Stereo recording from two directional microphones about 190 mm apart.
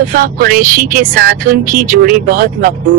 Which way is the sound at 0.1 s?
50° right (ahead or behind).